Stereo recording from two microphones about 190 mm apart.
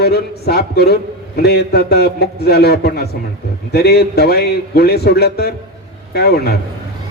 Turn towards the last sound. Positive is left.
turn(degrees=55)  # may be behind; listen again after turning